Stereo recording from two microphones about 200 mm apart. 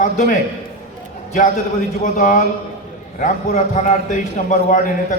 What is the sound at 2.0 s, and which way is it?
A man's voice, 40° left (ahead or behind).